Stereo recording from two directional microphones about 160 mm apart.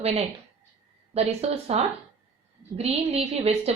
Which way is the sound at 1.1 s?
40° right (ahead or behind).